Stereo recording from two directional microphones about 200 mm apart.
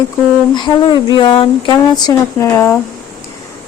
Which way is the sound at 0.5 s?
20° left (ahead or behind).